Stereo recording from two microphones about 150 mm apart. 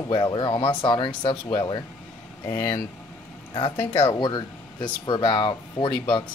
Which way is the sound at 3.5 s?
35° left (ahead or behind).